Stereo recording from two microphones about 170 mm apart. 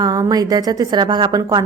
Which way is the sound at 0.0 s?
20° right (ahead or behind).